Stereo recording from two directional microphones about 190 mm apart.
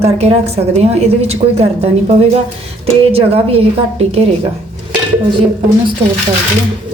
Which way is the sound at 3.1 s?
30° right (ahead or behind).